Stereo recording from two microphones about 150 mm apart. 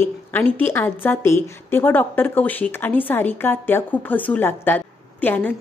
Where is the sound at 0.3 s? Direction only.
15° left (ahead or behind).